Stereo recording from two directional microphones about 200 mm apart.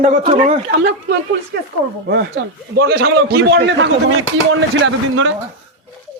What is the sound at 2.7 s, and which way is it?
A man's voice, 55° right (ahead or behind).